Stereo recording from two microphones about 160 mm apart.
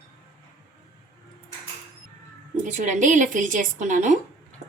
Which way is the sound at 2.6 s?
50° right (ahead or behind).